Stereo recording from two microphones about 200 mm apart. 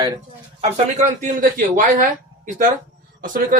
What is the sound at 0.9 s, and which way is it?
Speech, 35° right (ahead or behind).